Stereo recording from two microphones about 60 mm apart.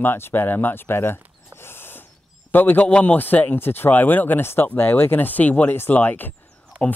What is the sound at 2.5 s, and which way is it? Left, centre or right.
Speech, left.